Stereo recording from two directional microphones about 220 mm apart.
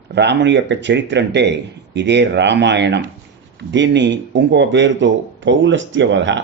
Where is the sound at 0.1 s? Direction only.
50° right (ahead or behind).